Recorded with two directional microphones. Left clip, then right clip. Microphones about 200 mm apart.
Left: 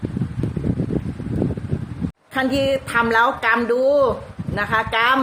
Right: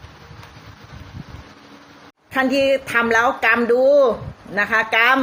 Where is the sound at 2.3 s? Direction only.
5° right (ahead or behind).